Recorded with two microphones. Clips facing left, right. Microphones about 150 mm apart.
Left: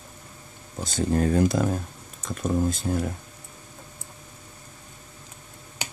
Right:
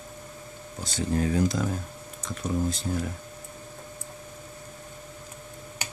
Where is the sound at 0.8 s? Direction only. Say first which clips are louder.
Left 3 dB; 45° left (ahead or behind).